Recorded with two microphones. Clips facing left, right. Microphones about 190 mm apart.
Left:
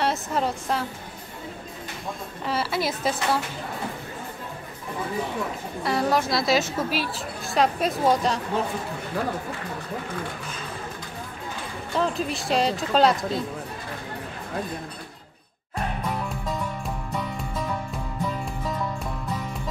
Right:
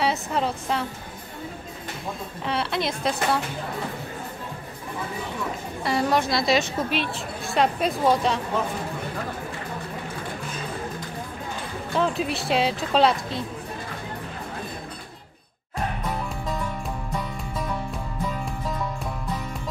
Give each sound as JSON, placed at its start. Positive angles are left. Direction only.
{"t": 0.0, "sound": "a woman's voice", "side_deg": 0}
{"t": 2.4, "sound": "a woman's voice", "side_deg": 0}
{"t": 5.9, "sound": "a woman's voice", "side_deg": 0}
{"t": 11.9, "sound": "a woman's voice", "side_deg": 0}